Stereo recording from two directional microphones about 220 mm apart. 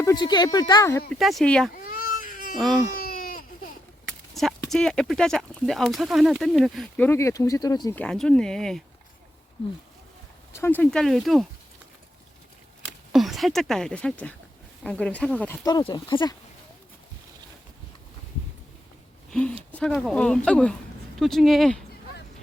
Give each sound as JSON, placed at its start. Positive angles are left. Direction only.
{"t": 0.0, "sound": "speech", "side_deg": 15}
{"t": 1.1, "sound": "speech", "side_deg": 0}
{"t": 2.2, "sound": "a sound", "side_deg": 40}
{"t": 3.0, "sound": "baby cry", "side_deg": 40}
{"t": 4.0, "sound": "a sound", "side_deg": 0}
{"t": 4.7, "sound": "speech", "side_deg": 5}
{"t": 10.5, "sound": "speech", "side_deg": 10}
{"t": 13.1, "sound": "speech", "side_deg": 0}
{"t": 19.3, "sound": "speech", "side_deg": 5}